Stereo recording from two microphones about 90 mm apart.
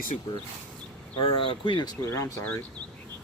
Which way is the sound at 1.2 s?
70° left (ahead or behind).